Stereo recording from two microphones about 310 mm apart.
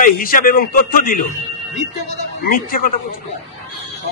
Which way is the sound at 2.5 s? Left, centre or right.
Left.